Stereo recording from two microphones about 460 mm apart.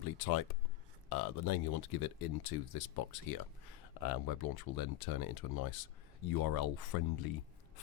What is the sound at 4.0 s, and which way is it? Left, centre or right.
Speech, left.